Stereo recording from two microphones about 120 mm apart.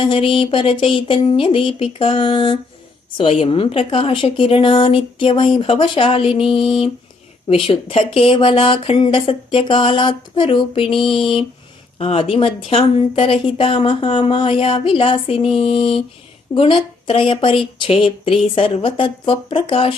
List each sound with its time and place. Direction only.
0.0 s a woman's voice: 50° left (ahead or behind)